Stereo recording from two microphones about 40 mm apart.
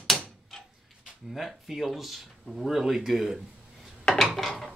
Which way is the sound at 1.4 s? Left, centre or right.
Centre.